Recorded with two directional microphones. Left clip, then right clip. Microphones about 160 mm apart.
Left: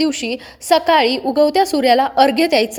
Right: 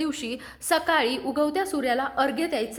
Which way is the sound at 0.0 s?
30° left (ahead or behind).